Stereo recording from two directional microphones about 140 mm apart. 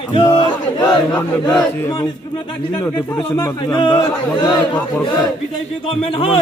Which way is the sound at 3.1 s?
25° left (ahead or behind).